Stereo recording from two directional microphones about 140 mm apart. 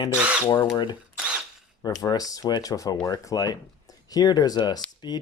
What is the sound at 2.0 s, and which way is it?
Speech, 25° left (ahead or behind).